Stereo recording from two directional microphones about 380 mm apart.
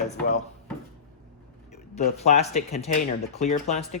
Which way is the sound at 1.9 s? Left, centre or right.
Centre.